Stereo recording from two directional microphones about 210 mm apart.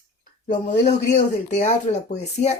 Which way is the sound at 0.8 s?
50° left (ahead or behind).